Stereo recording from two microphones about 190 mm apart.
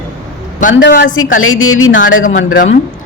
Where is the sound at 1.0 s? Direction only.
90° left.